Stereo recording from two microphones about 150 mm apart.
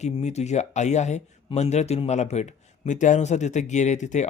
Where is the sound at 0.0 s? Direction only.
50° left (ahead or behind).